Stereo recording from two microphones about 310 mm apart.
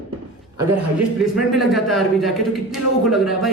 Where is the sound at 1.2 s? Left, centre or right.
Centre.